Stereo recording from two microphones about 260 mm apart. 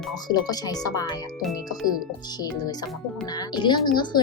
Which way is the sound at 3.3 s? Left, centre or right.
Centre.